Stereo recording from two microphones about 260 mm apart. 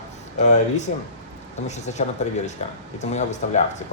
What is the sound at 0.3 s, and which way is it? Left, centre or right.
Speech, left.